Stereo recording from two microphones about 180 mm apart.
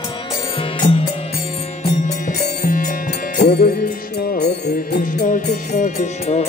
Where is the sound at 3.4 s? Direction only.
60° left (ahead or behind).